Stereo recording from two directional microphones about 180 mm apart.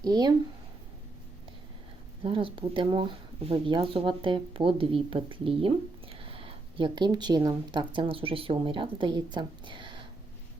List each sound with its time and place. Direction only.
0.0 s speech: 20° right (ahead or behind)
2.2 s speech: 30° right (ahead or behind)